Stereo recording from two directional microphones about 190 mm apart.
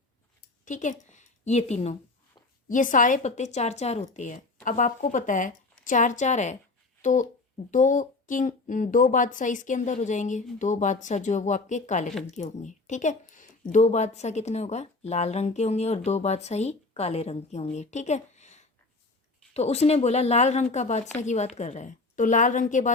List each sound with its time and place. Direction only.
0.6 s a woman's voice: 40° left (ahead or behind)